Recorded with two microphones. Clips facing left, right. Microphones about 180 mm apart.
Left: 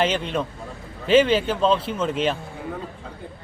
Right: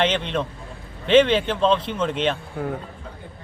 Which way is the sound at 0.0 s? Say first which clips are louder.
Even; 5° left (ahead or behind).